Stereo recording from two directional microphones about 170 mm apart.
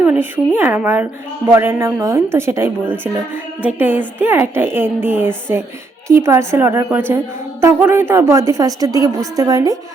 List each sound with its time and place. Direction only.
0.0 s a woman's voice: 10° right (ahead or behind)